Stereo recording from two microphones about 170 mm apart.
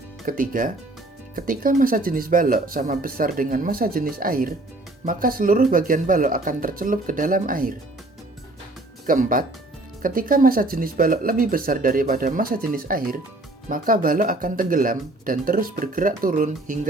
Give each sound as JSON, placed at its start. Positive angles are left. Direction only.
{"t": 0.3, "sound": "speech", "side_deg": -50}
{"t": 9.0, "sound": "speech", "side_deg": -50}